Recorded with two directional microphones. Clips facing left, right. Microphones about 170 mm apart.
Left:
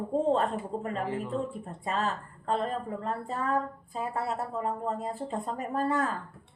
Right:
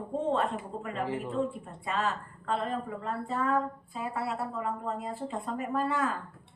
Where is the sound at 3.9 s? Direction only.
40° left (ahead or behind).